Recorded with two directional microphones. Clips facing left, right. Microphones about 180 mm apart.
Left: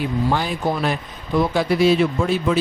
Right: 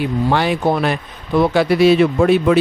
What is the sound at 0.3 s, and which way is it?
A man's voice, 75° right (ahead or behind).